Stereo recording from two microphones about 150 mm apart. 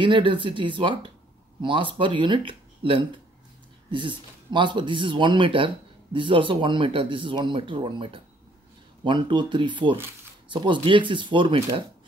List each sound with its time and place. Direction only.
0.0 s speech: 35° right (ahead or behind)